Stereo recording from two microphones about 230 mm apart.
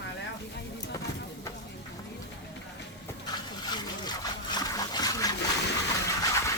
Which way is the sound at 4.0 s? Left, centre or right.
Centre.